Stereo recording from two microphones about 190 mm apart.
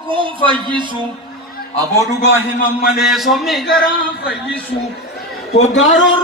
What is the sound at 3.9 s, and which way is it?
Speech, 60° left (ahead or behind).